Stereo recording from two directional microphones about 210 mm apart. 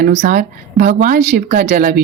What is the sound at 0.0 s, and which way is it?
Speech, 40° right (ahead or behind).